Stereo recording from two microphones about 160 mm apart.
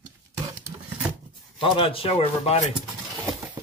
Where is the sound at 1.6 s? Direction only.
35° left (ahead or behind).